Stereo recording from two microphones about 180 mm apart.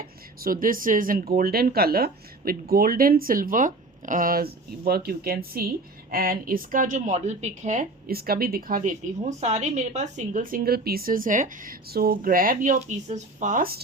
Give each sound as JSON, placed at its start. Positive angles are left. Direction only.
{"t": 0.0, "sound": "speech", "side_deg": -50}